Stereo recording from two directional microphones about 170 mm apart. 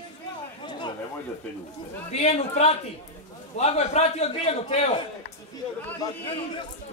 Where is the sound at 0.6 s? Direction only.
25° left (ahead or behind).